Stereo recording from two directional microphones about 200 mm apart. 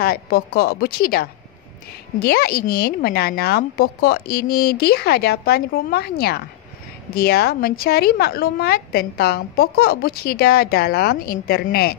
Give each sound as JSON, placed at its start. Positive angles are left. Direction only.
{"t": 0.0, "sound": "a woman's voice", "side_deg": 50}